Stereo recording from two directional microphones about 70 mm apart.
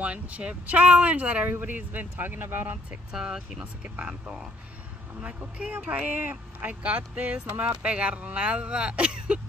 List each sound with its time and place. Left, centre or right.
0.0 s speech: centre
3.1 s speech: centre
3.8 s speech: right